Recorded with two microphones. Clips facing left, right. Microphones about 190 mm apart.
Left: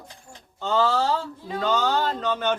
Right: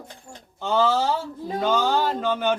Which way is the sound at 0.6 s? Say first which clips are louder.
Right 1 dB; 10° right (ahead or behind).